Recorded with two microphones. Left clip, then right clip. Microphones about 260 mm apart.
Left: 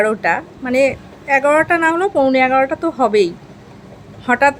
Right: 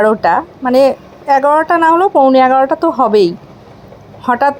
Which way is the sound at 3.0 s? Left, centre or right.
Centre.